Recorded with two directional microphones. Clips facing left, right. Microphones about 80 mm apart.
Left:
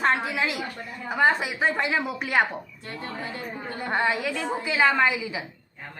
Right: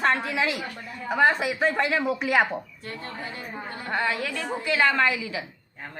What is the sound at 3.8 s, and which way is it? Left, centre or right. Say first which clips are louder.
Speech: left 2 dB; left.